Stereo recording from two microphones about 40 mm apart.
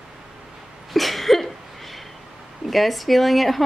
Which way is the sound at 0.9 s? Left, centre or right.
Centre.